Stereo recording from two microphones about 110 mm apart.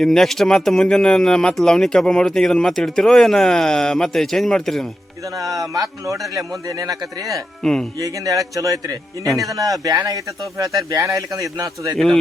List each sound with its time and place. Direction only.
0.0 s speech: 5° left (ahead or behind)
5.4 s a man's voice: 30° right (ahead or behind)
7.6 s speech: 5° left (ahead or behind)
7.9 s a man's voice: 30° right (ahead or behind)
9.2 s speech: centre (ahead or behind)
9.5 s a man's voice: 30° right (ahead or behind)
10.9 s a man's voice: 30° right (ahead or behind)
11.9 s speech: 5° left (ahead or behind)